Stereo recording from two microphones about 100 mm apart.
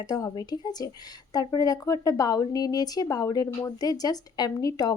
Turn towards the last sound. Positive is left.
turn(degrees=40)  # may be behind; listen again after turning